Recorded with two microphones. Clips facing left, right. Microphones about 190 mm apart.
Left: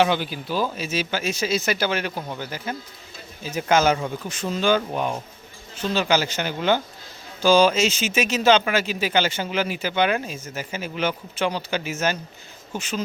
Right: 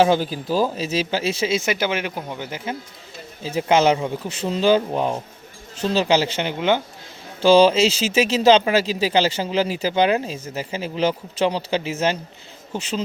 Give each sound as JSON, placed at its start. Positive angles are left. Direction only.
{"t": 0.0, "sound": "speech", "side_deg": -40}
{"t": 4.2, "sound": "speech", "side_deg": -30}
{"t": 7.4, "sound": "speech", "side_deg": -30}